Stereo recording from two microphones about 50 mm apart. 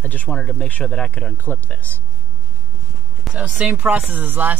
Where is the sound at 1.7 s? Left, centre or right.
Left.